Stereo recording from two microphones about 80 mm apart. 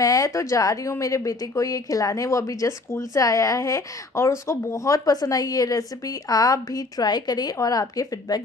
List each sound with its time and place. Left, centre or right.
0.0 s speech: left